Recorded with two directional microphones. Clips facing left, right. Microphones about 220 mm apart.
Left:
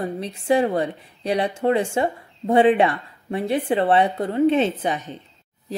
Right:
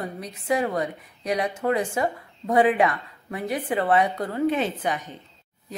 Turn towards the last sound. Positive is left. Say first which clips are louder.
# left 3 dB
turn(degrees=25)  # may be behind; listen again after turning